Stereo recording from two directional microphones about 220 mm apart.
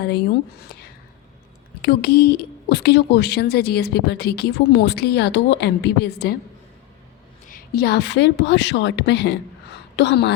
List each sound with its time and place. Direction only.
1.8 s speech: 45° left (ahead or behind)
7.4 s a woman's voice: 40° left (ahead or behind)